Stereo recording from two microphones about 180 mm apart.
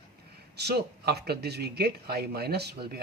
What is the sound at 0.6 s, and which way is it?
Speech, 65° right (ahead or behind).